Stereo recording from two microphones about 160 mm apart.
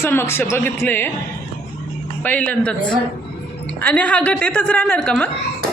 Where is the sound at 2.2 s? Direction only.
10° left (ahead or behind).